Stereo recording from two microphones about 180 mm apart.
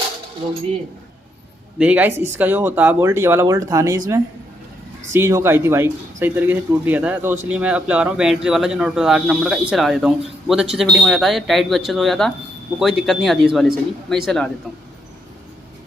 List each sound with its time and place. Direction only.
1.8 s speech: 10° right (ahead or behind)